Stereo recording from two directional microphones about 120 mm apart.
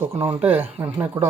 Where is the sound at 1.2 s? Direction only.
40° right (ahead or behind).